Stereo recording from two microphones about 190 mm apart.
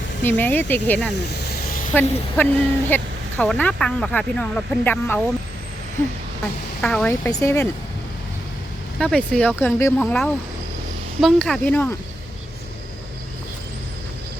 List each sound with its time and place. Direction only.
0.2 s speech: 10° left (ahead or behind)
1.1 s a sound: 60° left (ahead or behind)
1.9 s speech: 10° left (ahead or behind)
6.8 s speech: 5° left (ahead or behind)
7.3 s speech: 15° left (ahead or behind)
9.0 s speech: 5° left (ahead or behind)